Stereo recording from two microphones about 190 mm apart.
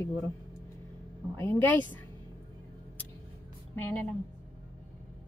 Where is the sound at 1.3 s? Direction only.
10° left (ahead or behind).